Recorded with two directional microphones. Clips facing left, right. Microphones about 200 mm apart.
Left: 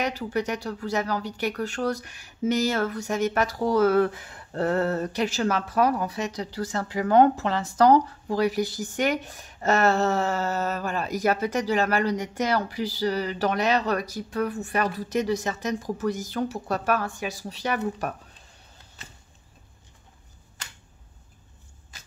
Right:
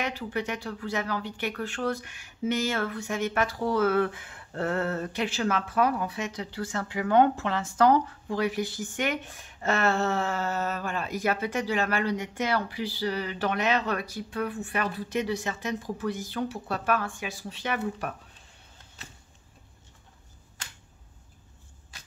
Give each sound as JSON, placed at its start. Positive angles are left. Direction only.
{"t": 0.0, "sound": "speech", "side_deg": 40}